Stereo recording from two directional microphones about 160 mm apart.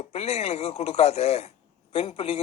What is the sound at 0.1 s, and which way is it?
A man's voice, 40° left (ahead or behind).